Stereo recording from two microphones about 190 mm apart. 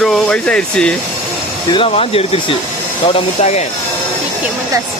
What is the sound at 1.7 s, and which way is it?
Speech, 30° left (ahead or behind).